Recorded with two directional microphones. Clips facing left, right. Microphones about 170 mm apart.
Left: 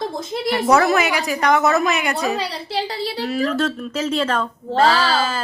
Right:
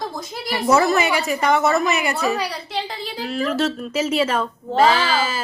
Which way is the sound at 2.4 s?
35° left (ahead or behind).